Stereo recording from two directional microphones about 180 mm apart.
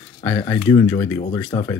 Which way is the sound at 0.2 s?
15° left (ahead or behind).